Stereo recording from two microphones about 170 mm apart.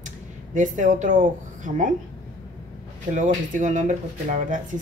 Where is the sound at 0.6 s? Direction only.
45° right (ahead or behind).